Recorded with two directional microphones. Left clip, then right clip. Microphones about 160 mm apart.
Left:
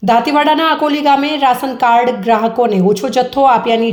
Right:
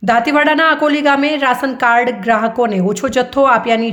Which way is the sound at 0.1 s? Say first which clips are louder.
Left 1 dB; 10° right (ahead or behind).